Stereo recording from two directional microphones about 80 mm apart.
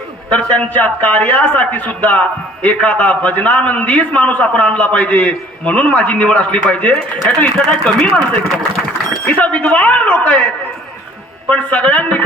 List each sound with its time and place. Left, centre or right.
0.3 s a man's voice: centre
9.2 s a man's voice: centre